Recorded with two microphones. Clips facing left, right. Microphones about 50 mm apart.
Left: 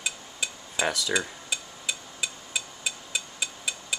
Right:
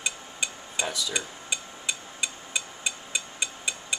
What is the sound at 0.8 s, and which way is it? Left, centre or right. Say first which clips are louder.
Speech: left 4 dB; left.